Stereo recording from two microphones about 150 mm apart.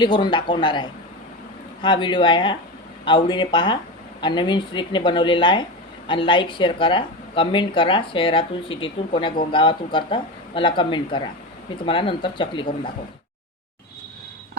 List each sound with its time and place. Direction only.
0.0 s speech: 30° left (ahead or behind)